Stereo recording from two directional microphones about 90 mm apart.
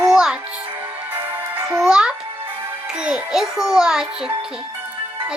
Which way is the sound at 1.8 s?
10° right (ahead or behind).